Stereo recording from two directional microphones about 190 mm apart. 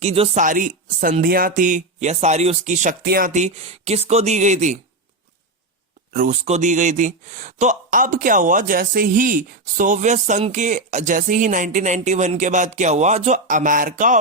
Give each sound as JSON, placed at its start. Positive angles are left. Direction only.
{"t": 0.0, "sound": "speech", "side_deg": -35}
{"t": 6.1, "sound": "speech", "side_deg": -40}